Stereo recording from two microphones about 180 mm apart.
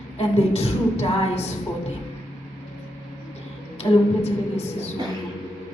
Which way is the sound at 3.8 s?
35° left (ahead or behind).